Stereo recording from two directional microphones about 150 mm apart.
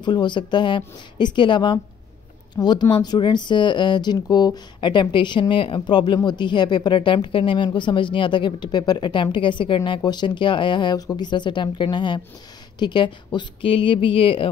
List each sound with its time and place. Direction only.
0.0 s speech: 30° left (ahead or behind)